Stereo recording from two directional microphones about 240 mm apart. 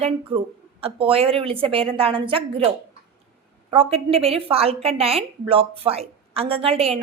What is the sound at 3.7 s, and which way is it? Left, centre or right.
A woman's voice, right.